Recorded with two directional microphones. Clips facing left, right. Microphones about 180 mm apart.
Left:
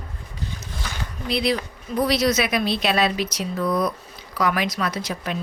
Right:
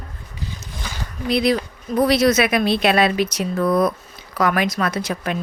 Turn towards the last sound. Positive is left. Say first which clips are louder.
# right 4 dB
turn(degrees=-55)  # may be behind; listen again after turning